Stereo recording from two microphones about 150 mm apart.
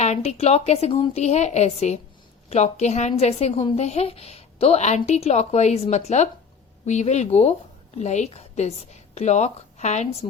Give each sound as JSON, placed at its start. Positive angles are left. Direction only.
{"t": 0.0, "sound": "a woman's voice", "side_deg": 45}